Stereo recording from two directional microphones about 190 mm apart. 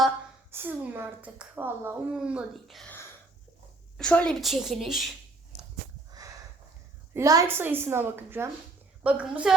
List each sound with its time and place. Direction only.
0.5 s speech: 10° right (ahead or behind)
3.9 s a woman's voice: 5° left (ahead or behind)
6.1 s a sound: 20° right (ahead or behind)
7.1 s a woman's voice: 15° right (ahead or behind)